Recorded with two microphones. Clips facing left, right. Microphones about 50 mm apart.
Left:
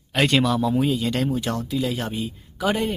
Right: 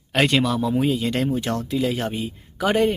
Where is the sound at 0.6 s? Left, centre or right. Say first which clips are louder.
Even; centre; by 2.9 s right.